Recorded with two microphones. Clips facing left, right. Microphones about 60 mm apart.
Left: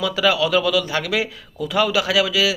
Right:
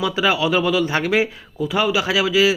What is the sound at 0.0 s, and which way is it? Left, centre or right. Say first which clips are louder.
A man's voice: even; right.